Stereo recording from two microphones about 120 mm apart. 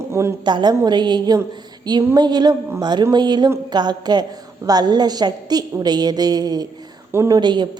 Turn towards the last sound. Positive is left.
turn(degrees=-40)  # may be behind; listen again after turning